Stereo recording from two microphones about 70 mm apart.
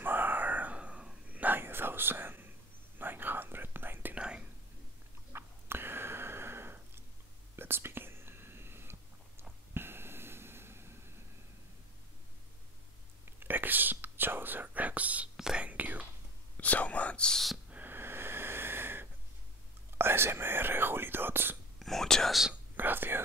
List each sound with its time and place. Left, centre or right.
0.0 s whispering: right
4.2 s whispering: centre
5.3 s a sound: right
7.5 s whispering: right
9.4 s a sound: right
13.2 s whispering: right
15.3 s whispering: centre
15.6 s whispering: right
16.5 s whispering: left
17.6 s wheeze: right
20.0 s whispering: right
21.7 s whispering: centre
22.3 s whispering: centre
22.8 s whispering: right